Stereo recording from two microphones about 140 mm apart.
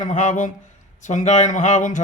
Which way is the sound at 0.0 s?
60° left (ahead or behind).